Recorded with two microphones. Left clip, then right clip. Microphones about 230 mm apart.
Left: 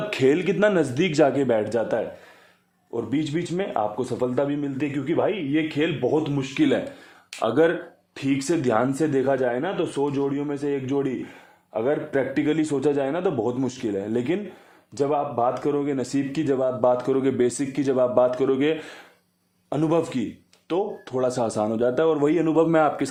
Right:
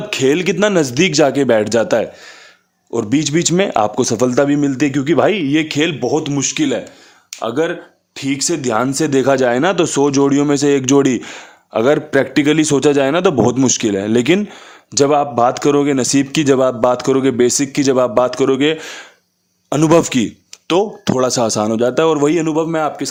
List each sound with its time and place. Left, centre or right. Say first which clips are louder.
0.1 s speech: right 7 dB; centre; by 6.6 s right
6.6 s speech: right 4 dB; right
22.5 s a man's voice: right 2 dB; centre